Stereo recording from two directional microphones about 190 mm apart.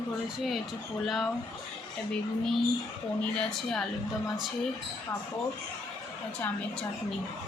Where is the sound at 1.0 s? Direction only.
Centre (ahead or behind).